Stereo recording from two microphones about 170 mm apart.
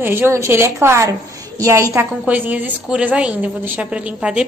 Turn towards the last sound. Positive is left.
turn(degrees=-5)  # may be behind; listen again after turning